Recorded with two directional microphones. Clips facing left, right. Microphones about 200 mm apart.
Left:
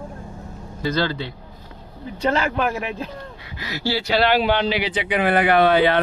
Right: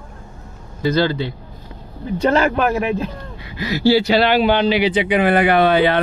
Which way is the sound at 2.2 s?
50° right (ahead or behind).